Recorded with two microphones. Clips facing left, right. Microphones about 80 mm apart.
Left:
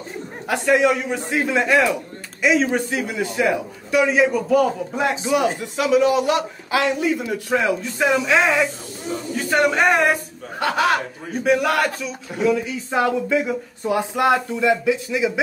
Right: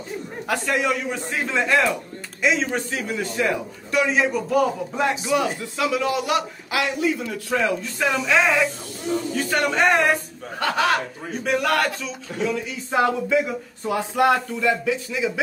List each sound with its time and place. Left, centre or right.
0.5 s a man's voice: centre
5.6 s a man's voice: left; by 13.4 s centre
13.8 s a man's voice: centre